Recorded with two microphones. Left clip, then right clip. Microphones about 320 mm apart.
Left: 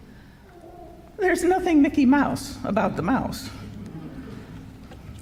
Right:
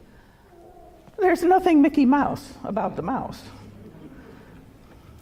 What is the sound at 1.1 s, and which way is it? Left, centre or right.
A woman's voice, right.